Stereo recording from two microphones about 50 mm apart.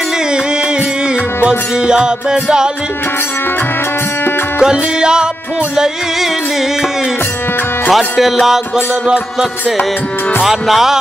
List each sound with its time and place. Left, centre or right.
1.4 s music: centre
4.6 s music: centre
7.9 s music: centre